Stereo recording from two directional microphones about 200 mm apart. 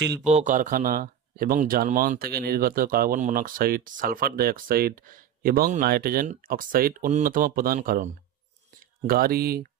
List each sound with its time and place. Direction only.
0.3 s speech: 35° right (ahead or behind)